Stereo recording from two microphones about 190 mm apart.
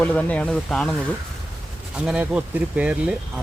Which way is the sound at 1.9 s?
5° right (ahead or behind).